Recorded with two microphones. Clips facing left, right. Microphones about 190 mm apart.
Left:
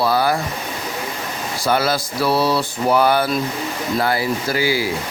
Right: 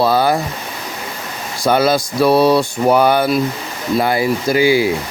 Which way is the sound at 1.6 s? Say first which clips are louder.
Right 5 dB; 20° right (ahead or behind).